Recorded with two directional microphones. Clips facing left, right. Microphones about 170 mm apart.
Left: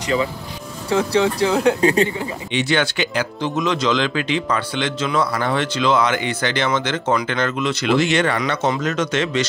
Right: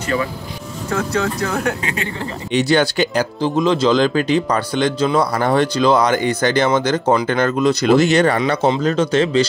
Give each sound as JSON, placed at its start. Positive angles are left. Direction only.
{"t": 0.8, "sound": "speech", "side_deg": 15}
{"t": 1.8, "sound": "speech", "side_deg": 35}
{"t": 2.5, "sound": "speech", "side_deg": -40}
{"t": 8.4, "sound": "speech", "side_deg": -30}